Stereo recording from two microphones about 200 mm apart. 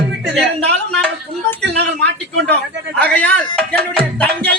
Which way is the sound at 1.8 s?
55° right (ahead or behind).